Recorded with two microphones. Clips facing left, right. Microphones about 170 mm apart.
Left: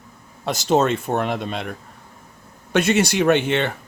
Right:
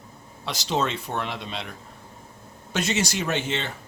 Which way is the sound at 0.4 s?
50° left (ahead or behind).